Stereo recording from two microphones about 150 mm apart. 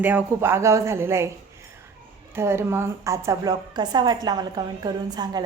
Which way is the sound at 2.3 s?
15° right (ahead or behind).